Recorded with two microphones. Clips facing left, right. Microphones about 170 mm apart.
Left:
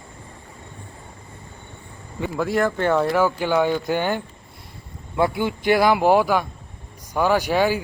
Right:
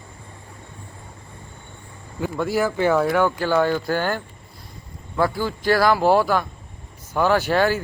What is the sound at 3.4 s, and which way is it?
Speech, 15° left (ahead or behind).